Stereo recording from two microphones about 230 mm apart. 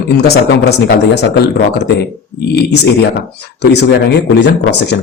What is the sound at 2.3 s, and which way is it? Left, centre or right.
Speech, left.